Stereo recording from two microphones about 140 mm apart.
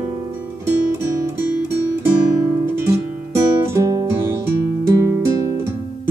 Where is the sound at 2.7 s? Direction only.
20° right (ahead or behind).